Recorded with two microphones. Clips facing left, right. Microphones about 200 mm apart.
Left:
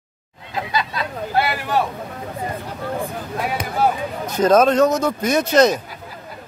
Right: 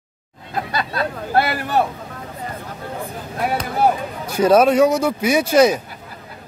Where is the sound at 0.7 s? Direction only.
55° right (ahead or behind).